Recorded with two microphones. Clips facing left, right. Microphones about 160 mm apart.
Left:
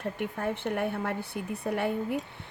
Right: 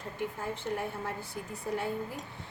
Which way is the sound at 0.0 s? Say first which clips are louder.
Left 5 dB; 65° left (ahead or behind).